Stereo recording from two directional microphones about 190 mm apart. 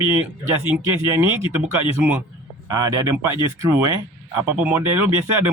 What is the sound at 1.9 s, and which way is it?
Speech, 10° right (ahead or behind).